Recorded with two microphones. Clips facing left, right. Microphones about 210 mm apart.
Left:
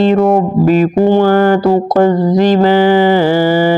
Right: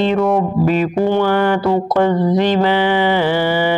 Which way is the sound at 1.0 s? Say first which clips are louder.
Left 5 dB; 40° left (ahead or behind).